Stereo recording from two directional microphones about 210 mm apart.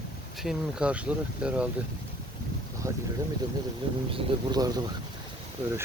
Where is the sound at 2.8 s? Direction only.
15° right (ahead or behind).